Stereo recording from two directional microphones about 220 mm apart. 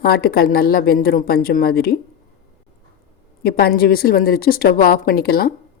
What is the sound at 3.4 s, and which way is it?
Speech, 45° left (ahead or behind).